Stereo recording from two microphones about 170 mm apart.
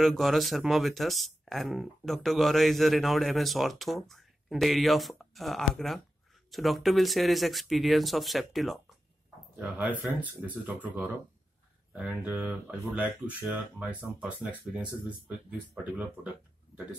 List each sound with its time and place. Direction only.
0.0 s speech: centre (ahead or behind)